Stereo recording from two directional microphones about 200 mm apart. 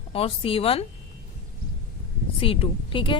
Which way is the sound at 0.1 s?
30° left (ahead or behind).